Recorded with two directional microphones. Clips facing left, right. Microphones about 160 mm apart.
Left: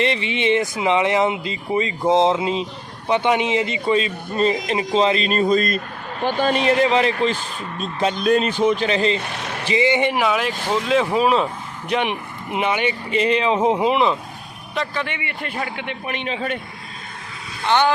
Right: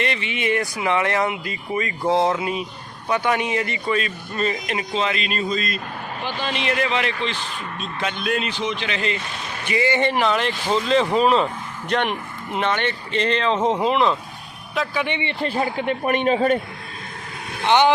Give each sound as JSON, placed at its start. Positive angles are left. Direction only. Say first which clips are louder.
{"t": 0.0, "sound": "a man's voice", "louder": "left 4 dB", "side_deg": 30}
{"t": 9.7, "sound": "speech", "louder": "left 2 dB", "side_deg": 15}
{"t": 15.0, "sound": "a man's voice", "louder": "right 5 dB", "side_deg": -25}
{"t": 17.6, "sound": "speech", "louder": "right 2 dB", "side_deg": -20}